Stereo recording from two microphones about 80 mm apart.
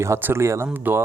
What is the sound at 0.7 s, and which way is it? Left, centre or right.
Speech, right.